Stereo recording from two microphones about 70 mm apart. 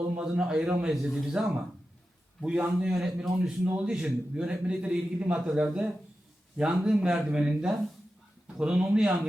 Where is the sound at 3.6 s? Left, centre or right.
Centre.